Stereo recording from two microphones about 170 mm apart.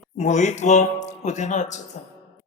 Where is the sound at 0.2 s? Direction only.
45° left (ahead or behind).